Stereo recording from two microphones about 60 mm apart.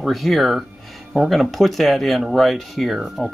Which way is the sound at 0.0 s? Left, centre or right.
Centre.